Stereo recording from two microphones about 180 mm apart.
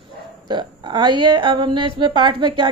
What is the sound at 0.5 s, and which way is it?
A woman's voice, 25° right (ahead or behind).